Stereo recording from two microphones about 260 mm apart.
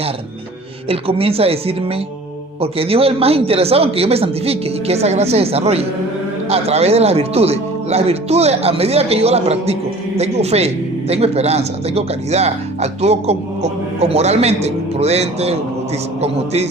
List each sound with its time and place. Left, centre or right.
0.9 s speech: right